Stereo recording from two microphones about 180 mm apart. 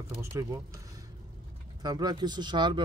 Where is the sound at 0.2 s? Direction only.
20° right (ahead or behind).